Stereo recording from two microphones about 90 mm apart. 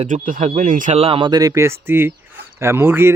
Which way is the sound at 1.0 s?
80° right.